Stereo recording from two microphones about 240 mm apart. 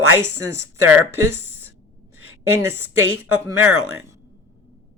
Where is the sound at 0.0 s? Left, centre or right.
Right.